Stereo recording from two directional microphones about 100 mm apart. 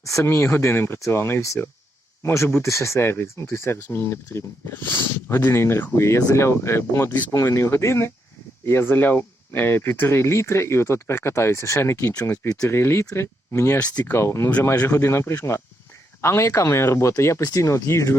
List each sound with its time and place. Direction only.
0.0 s speech: 30° left (ahead or behind)